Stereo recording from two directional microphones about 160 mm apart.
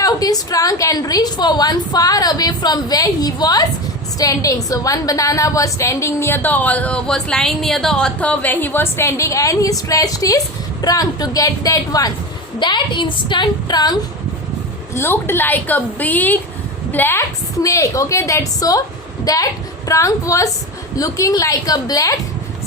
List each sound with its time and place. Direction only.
0.0 s a woman's voice: 20° left (ahead or behind)
14.9 s a woman's voice: 15° left (ahead or behind)